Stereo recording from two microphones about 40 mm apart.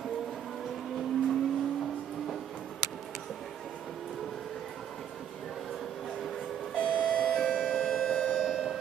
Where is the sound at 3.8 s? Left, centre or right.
Centre.